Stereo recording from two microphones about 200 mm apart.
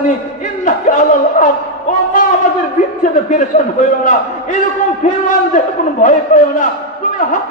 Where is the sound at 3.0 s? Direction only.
40° left (ahead or behind).